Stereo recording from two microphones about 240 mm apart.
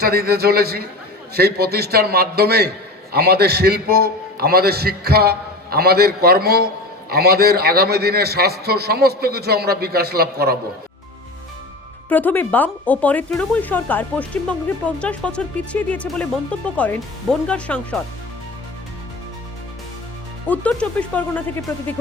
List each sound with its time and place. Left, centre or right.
0.0 s a man's voice: right
12.0 s speech: centre
20.5 s speech: centre